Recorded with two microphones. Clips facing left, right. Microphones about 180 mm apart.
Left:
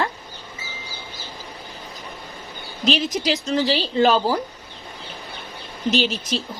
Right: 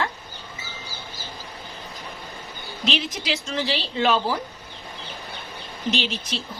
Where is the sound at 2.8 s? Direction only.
40° left (ahead or behind).